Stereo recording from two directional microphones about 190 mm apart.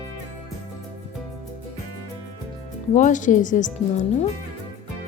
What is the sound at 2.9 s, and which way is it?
Speech, 40° left (ahead or behind).